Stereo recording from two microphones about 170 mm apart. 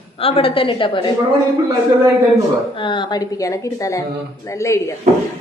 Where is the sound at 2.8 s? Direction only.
30° left (ahead or behind).